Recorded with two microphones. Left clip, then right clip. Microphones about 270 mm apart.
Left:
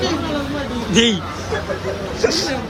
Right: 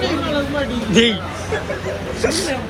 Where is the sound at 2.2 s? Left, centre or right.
Centre.